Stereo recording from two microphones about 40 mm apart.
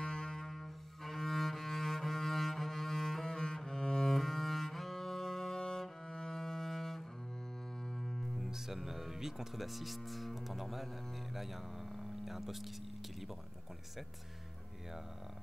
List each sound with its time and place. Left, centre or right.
0.0 s double bass: centre
1.0 s cello: centre
8.0 s music: centre
8.5 s speech: centre